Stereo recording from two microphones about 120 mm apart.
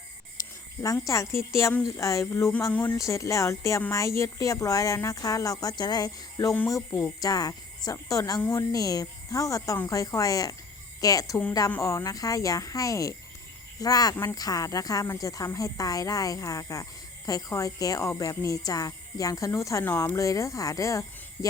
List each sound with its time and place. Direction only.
1.0 s speech: 25° left (ahead or behind)